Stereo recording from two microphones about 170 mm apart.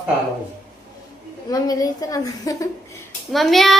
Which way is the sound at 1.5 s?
20° left (ahead or behind).